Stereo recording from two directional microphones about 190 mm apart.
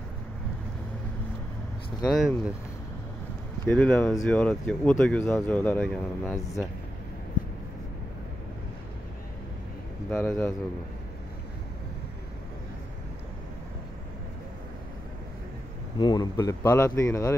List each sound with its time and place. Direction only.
2.1 s speech: 5° right (ahead or behind)
3.6 s speech: 10° left (ahead or behind)
10.0 s speech: 5° left (ahead or behind)
16.0 s speech: 20° left (ahead or behind)